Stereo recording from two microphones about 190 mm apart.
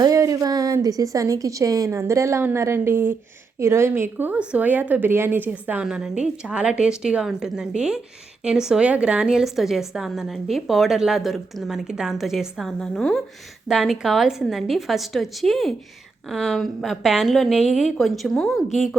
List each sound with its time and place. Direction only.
0.0 s a woman's voice: 15° right (ahead or behind); by 18.9 s centre (ahead or behind)